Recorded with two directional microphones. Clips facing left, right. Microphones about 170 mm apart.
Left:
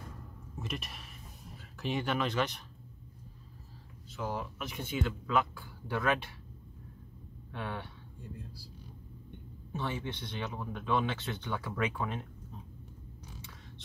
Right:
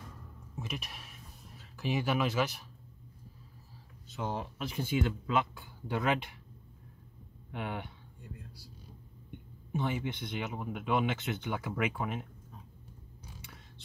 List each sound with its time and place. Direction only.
0.6 s speech: centre (ahead or behind)
4.2 s speech: 25° right (ahead or behind)
7.5 s speech: 15° right (ahead or behind)
9.7 s speech: 10° right (ahead or behind)